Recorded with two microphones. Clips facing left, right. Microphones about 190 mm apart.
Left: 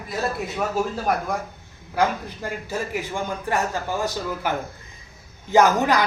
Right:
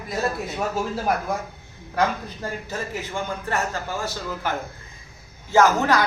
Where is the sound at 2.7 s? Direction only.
15° left (ahead or behind).